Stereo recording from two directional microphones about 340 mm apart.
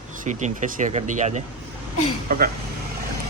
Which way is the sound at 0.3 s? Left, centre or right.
Right.